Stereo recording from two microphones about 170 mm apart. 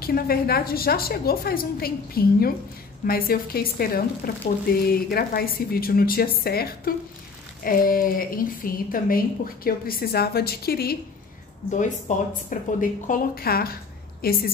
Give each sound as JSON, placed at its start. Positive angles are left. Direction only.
{"t": 0.0, "sound": "a woman's voice", "side_deg": 60}
{"t": 11.7, "sound": "a woman's voice", "side_deg": 45}